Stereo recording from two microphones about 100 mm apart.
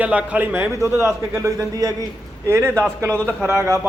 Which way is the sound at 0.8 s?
30° right (ahead or behind).